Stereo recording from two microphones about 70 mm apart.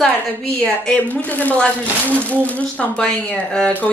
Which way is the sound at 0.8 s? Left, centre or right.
Centre.